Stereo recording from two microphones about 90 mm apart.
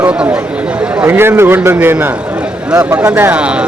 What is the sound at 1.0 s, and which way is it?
A man's voice, 25° right (ahead or behind).